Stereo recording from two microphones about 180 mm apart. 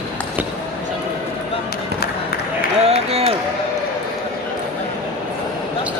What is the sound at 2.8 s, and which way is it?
Applause, 35° right (ahead or behind).